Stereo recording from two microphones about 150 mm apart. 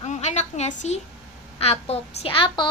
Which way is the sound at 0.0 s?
50° left (ahead or behind).